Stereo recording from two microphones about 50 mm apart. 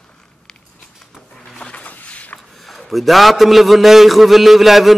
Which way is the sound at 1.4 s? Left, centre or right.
Centre.